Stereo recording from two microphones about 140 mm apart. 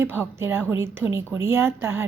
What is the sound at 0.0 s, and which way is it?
A woman's voice, 15° right (ahead or behind).